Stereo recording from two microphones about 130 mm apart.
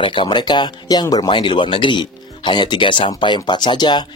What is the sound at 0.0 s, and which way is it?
Speech, 40° left (ahead or behind).